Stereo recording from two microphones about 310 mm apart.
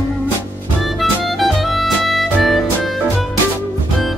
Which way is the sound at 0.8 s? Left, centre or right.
Centre.